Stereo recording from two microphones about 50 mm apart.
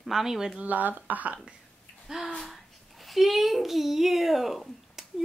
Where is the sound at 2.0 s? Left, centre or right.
Centre.